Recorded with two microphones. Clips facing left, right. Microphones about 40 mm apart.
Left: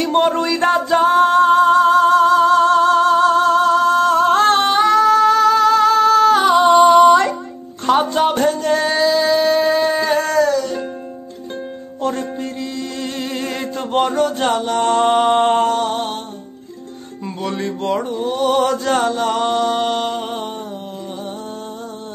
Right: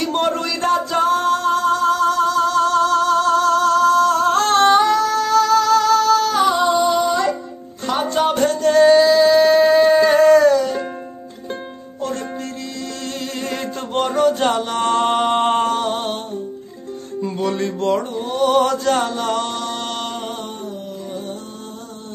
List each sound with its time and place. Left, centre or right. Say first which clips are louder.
0.0 s music: left 4 dB; centre
0.5 s music: left 3 dB; left
4.6 s singing: left 2 dB; centre; by 7.2 s left
7.8 s music: left 5 dB; left
8.2 s music: left 1 dB; centre
13.0 s a sound: left 2 dB; centre
14.1 s music: right 1 dB; centre
17.4 s mantra: right 1 dB; centre
19.4 s music: left 7 dB; centre